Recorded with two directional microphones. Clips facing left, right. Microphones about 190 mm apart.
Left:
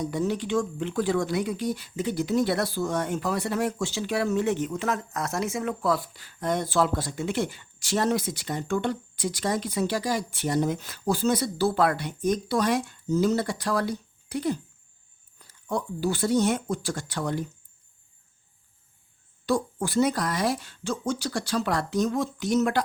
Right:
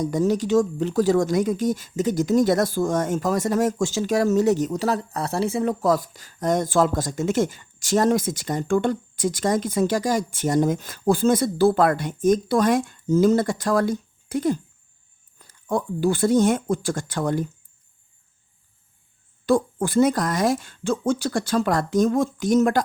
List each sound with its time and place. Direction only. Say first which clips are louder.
0.0 s speech: right 6 dB; 45° right (ahead or behind)
19.5 s speech: right 6 dB; 50° right (ahead or behind)